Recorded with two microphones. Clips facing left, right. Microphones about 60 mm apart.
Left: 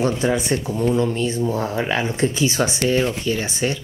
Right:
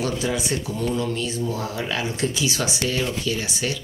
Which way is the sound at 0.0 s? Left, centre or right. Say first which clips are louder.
Left 5 dB; left.